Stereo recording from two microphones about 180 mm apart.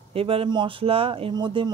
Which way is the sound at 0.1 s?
30° right (ahead or behind).